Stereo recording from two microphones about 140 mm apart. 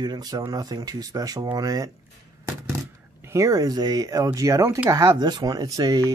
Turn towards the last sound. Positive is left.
turn(degrees=-30)  # may be behind; listen again after turning